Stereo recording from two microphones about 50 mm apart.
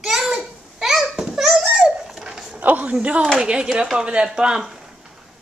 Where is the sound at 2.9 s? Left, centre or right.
Right.